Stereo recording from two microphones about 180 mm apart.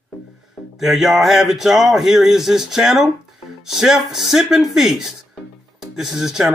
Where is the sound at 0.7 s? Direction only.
Centre (ahead or behind).